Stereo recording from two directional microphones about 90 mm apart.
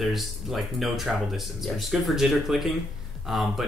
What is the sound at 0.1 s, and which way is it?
Speech, centre (ahead or behind).